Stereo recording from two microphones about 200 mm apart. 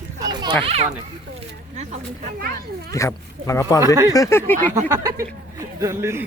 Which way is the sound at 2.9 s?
15° left (ahead or behind).